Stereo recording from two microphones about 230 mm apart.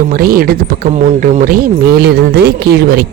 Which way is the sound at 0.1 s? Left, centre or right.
Right.